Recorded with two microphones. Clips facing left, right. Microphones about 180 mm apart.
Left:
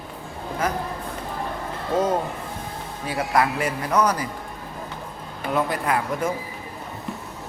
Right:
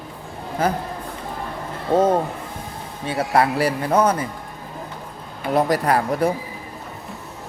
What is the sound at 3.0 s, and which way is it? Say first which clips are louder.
Speech: right 3 dB; 30° right (ahead or behind).